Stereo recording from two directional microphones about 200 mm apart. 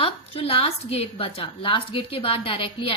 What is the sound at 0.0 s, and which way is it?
A woman's voice, 30° left (ahead or behind).